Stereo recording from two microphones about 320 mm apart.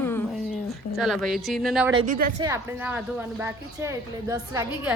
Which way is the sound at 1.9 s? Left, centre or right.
Centre.